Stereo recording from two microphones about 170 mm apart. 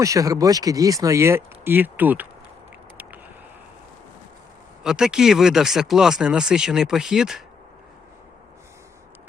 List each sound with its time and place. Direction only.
0.0 s speech: 20° right (ahead or behind)
4.8 s speech: 5° right (ahead or behind)